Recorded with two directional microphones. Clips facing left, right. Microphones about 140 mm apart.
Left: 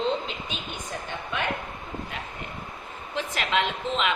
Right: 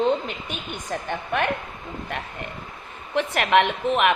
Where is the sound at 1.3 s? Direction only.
55° right (ahead or behind).